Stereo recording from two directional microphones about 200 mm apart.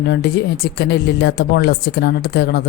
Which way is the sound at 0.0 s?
55° left (ahead or behind).